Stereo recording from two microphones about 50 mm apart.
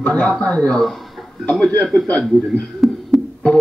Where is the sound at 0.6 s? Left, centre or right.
Centre.